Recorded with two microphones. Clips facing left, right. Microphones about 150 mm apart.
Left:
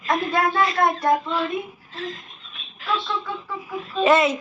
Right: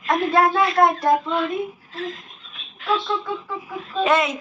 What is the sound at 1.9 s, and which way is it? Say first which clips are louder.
Speech: right 2 dB; centre (ahead or behind).